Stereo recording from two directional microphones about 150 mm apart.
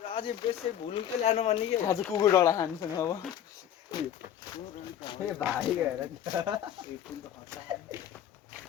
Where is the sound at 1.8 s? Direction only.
25° left (ahead or behind).